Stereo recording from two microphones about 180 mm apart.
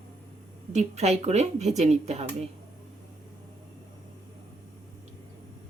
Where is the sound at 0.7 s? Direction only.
40° right (ahead or behind).